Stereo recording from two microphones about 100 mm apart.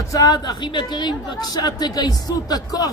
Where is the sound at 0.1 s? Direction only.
40° left (ahead or behind).